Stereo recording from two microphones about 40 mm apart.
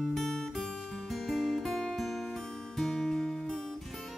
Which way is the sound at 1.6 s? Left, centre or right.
Centre.